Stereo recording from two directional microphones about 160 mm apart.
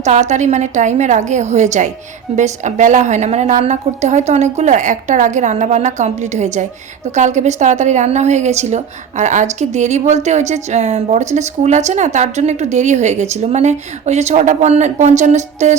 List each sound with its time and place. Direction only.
0.0 s a woman's voice: 45° right (ahead or behind)